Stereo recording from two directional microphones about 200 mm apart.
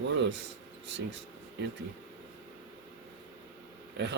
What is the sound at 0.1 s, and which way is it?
Speech, 60° right (ahead or behind).